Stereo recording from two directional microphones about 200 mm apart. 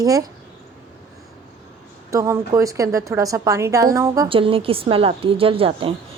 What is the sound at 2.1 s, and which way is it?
A woman's voice, 15° right (ahead or behind).